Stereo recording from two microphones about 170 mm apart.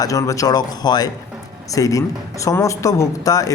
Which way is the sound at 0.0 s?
20° left (ahead or behind).